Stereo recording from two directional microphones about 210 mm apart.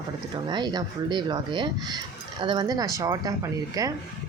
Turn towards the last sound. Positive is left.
turn(degrees=-15)  # may be behind; listen again after turning